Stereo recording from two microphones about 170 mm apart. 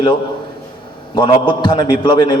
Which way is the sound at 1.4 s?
25° left (ahead or behind).